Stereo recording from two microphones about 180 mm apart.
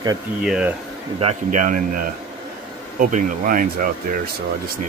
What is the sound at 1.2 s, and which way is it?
A man's voice, 40° right (ahead or behind).